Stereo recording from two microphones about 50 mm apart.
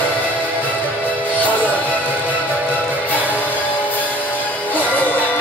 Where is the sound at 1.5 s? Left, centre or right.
Left.